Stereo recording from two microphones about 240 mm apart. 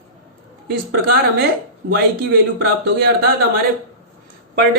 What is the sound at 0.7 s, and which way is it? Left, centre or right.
Speech, right.